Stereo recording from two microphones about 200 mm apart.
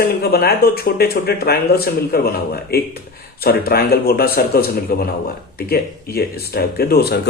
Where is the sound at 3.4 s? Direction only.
50° left (ahead or behind).